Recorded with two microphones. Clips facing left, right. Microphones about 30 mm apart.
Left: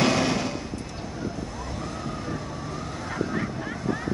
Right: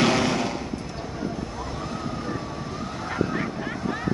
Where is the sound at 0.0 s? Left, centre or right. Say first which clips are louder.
Right 1 dB; centre.